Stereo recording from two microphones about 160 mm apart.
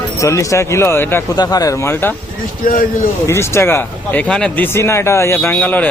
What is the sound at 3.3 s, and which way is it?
Speech, 15° left (ahead or behind).